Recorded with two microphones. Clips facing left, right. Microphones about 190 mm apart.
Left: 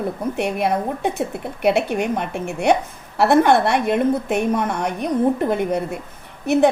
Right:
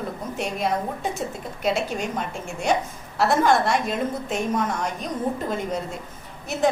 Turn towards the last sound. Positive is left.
turn(degrees=65)  # may be behind; listen again after turning